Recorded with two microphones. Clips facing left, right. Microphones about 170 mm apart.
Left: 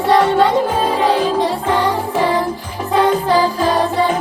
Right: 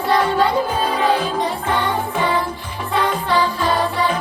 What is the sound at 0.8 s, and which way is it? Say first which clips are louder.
Music: left 3 dB; 35° left (ahead or behind).